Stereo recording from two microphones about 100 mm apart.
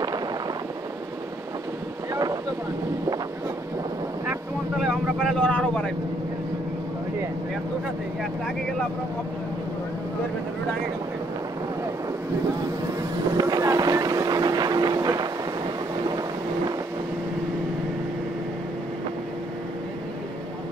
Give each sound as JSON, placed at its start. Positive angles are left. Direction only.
{"t": 4.8, "sound": "vehicle", "side_deg": 5}
{"t": 13.4, "sound": "vehicle", "side_deg": -40}